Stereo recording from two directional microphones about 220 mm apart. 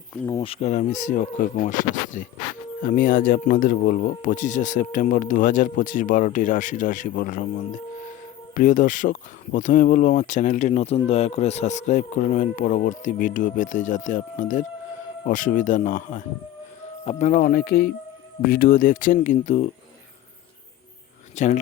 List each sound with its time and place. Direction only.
0.4 s speech: 30° left (ahead or behind)
21.3 s speech: 35° left (ahead or behind)